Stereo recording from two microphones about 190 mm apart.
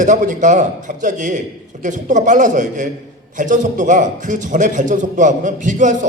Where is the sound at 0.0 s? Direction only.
40° right (ahead or behind).